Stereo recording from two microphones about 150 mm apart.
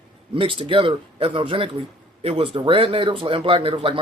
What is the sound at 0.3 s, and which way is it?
A man's voice, 35° right (ahead or behind).